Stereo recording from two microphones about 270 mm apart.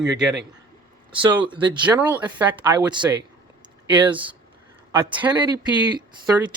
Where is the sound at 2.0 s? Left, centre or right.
Centre.